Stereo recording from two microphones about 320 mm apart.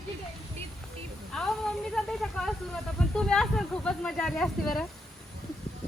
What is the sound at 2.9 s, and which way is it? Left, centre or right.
Speech, centre.